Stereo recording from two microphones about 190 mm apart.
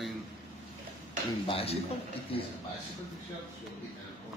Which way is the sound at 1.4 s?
30° left (ahead or behind).